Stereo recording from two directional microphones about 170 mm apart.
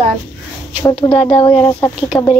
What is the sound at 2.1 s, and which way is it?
Speech, 10° left (ahead or behind).